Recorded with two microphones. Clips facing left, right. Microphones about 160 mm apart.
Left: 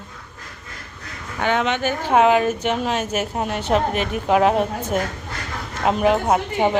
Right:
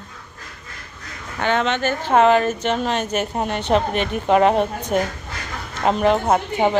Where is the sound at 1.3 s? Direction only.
10° left (ahead or behind).